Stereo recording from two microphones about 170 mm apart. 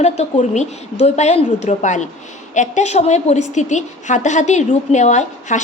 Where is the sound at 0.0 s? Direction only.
40° left (ahead or behind).